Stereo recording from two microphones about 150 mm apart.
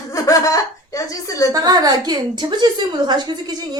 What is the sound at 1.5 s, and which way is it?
A woman's voice, 25° right (ahead or behind).